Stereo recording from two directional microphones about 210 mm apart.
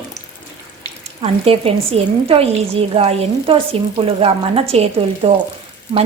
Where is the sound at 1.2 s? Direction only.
30° right (ahead or behind).